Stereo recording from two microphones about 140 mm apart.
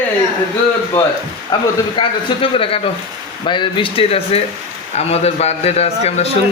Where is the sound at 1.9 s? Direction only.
40° left (ahead or behind).